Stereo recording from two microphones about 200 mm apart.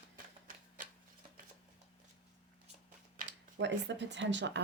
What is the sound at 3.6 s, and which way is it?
Speech, 60° right (ahead or behind).